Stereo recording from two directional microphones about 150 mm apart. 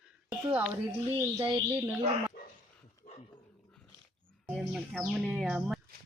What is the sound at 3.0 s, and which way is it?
Dog, 35° left (ahead or behind).